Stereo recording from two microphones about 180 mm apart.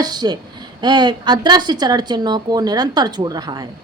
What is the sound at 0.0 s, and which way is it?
A woman's voice, 25° right (ahead or behind).